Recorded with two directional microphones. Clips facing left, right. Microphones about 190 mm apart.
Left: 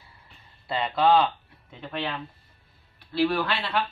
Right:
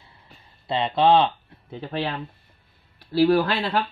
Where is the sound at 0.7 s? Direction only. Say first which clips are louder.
Right 3 dB; 25° right (ahead or behind).